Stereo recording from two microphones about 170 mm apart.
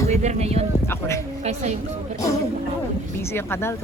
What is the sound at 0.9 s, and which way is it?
Speech, 15° left (ahead or behind).